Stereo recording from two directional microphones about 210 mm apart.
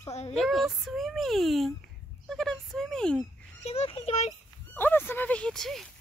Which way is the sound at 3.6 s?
30° left (ahead or behind).